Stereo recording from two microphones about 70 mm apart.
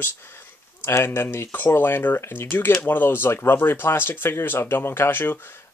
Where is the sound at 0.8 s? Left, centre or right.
Left.